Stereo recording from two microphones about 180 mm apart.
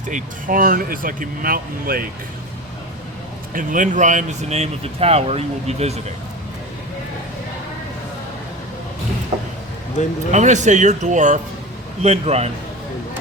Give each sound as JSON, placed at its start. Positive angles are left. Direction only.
{"t": 0.1, "sound": "speech", "side_deg": -45}
{"t": 3.5, "sound": "speech", "side_deg": -45}
{"t": 10.3, "sound": "speech", "side_deg": -40}